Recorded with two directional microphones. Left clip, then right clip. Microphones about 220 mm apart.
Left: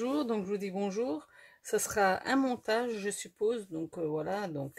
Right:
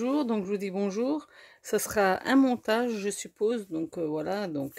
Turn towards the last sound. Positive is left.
turn(degrees=-40)  # may be behind; listen again after turning